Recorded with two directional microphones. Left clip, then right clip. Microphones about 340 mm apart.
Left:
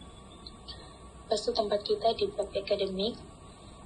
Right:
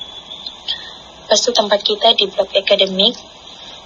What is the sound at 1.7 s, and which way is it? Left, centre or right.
A woman's voice, centre.